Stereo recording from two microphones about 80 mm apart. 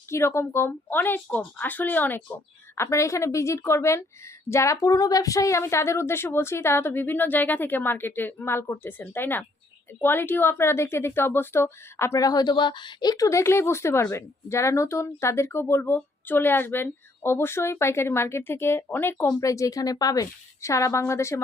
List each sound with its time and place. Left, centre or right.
0.1 s a woman's voice: left
2.7 s a woman's voice: left
12.2 s speech: left
19.3 s speech: left